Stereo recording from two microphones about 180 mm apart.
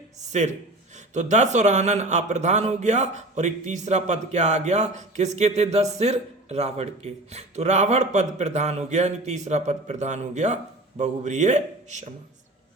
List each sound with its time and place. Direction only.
0.9 s a man's voice: 40° right (ahead or behind)